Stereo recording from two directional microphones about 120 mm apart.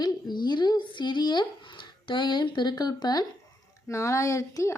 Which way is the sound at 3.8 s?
25° left (ahead or behind).